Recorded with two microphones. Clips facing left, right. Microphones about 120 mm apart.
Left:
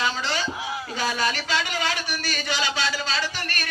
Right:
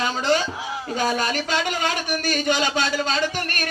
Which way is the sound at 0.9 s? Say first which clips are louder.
Right 4 dB; 45° right (ahead or behind).